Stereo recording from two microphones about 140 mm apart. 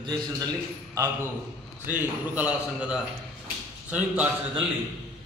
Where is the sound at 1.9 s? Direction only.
10° right (ahead or behind).